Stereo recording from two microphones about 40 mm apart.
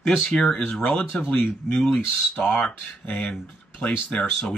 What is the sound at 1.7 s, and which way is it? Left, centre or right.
Speech, centre.